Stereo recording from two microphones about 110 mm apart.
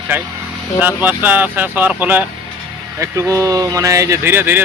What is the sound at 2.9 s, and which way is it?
Speech, 25° right (ahead or behind).